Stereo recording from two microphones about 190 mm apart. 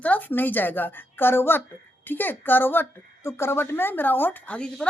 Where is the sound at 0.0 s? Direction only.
10° left (ahead or behind).